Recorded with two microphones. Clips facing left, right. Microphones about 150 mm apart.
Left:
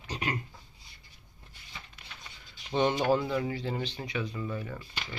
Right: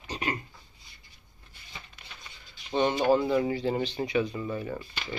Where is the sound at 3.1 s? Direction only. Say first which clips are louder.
Right 4 dB; 10° right (ahead or behind).